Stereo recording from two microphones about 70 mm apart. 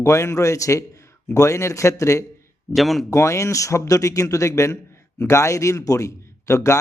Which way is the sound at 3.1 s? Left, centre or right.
Left.